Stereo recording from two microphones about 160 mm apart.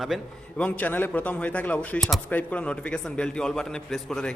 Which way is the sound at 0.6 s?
10° left (ahead or behind).